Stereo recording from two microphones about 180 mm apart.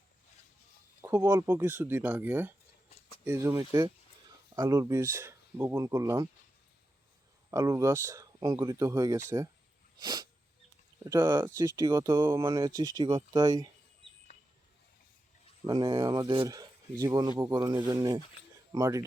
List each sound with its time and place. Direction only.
1.0 s speech: 15° right (ahead or behind)
7.5 s speech: 15° right (ahead or behind)
10.0 s sneeze: 20° right (ahead or behind)
11.0 s speech: 20° right (ahead or behind)
15.6 s speech: 25° right (ahead or behind)